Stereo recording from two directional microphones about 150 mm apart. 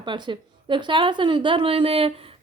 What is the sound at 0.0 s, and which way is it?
A woman's voice, 30° right (ahead or behind).